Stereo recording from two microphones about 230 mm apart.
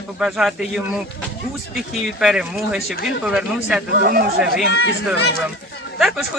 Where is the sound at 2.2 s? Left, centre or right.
Centre.